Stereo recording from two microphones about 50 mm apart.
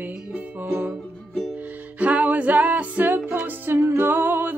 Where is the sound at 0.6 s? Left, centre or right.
Right.